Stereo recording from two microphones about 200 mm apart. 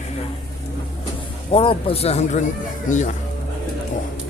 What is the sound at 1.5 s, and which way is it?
Speech, 30° left (ahead or behind).